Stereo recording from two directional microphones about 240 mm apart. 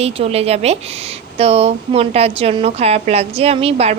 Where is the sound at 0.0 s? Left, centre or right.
Right.